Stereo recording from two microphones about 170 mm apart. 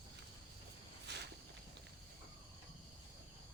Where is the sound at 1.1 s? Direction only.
90° right.